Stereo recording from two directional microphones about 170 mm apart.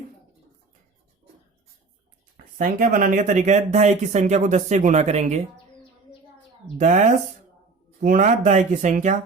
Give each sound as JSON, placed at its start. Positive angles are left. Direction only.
{"t": 2.6, "sound": "speech", "side_deg": -50}
{"t": 6.7, "sound": "speech", "side_deg": -45}